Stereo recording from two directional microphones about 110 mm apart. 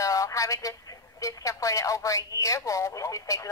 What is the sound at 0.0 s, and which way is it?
A woman's voice, 30° left (ahead or behind).